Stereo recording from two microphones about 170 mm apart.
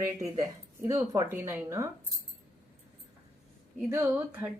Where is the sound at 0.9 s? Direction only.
20° right (ahead or behind).